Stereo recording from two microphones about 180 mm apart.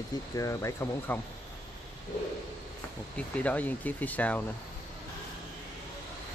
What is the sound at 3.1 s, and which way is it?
Speech, 5° left (ahead or behind).